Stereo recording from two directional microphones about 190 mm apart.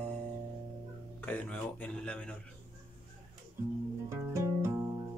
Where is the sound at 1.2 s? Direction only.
10° left (ahead or behind).